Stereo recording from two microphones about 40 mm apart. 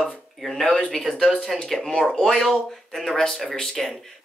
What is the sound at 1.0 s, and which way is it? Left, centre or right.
Speech, centre.